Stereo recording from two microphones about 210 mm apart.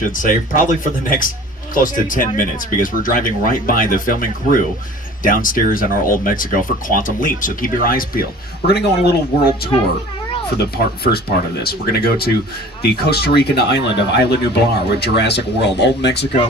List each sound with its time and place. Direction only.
0.1 s speech: 40° left (ahead or behind)
1.7 s speech: 40° left (ahead or behind)